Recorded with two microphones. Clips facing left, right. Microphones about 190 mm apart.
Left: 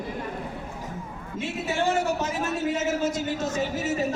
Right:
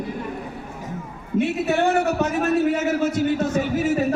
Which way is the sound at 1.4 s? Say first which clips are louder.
Right 7 dB; 60° right (ahead or behind).